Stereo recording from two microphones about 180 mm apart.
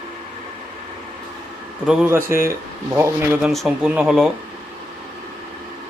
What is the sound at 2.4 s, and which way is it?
Speech, 15° right (ahead or behind).